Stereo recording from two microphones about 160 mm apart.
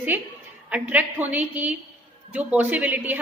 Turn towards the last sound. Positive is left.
turn(degrees=-10)  # may be behind; listen again after turning